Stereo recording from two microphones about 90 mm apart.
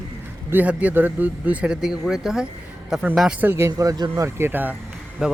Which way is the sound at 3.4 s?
25° right (ahead or behind).